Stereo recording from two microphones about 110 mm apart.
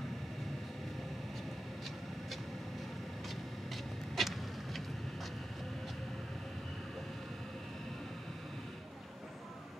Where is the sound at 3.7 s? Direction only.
Centre (ahead or behind).